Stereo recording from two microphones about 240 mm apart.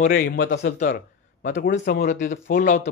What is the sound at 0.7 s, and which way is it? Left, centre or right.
A man's voice, left.